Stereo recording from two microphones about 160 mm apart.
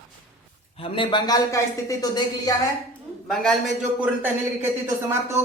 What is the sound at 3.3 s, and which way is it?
Speech, centre (ahead or behind).